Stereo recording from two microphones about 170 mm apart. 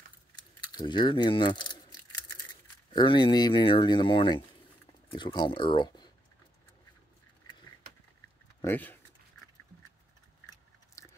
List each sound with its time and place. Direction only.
0.7 s speech: 25° left (ahead or behind)
2.9 s speech: 25° left (ahead or behind)
8.6 s speech: 10° left (ahead or behind)
11.0 s a sound: 15° left (ahead or behind)